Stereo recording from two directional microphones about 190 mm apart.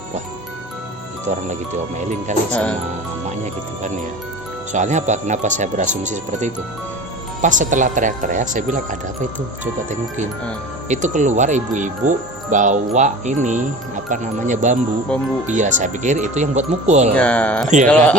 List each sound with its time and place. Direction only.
1.3 s speech: 40° right (ahead or behind)
2.5 s speech: 5° left (ahead or behind)
4.7 s speech: 40° right (ahead or behind)
10.8 s speech: 40° right (ahead or behind)
15.1 s speech: 5° left (ahead or behind)
15.4 s speech: 40° right (ahead or behind)
17.2 s speech: 5° left (ahead or behind)